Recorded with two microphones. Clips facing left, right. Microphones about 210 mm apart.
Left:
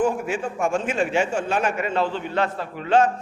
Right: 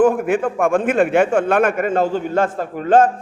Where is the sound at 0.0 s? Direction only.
55° right (ahead or behind).